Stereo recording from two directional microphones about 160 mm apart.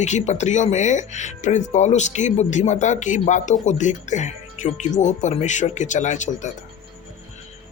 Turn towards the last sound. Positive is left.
turn(degrees=50)  # may be behind; listen again after turning